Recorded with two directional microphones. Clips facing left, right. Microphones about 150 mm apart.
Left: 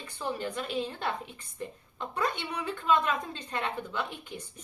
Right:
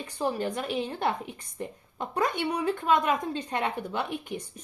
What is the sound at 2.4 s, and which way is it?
Speech, 35° right (ahead or behind).